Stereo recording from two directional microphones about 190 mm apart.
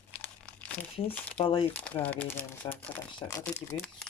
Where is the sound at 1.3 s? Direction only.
30° left (ahead or behind).